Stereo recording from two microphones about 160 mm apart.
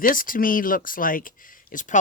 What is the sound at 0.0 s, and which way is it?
Speech, 60° left (ahead or behind).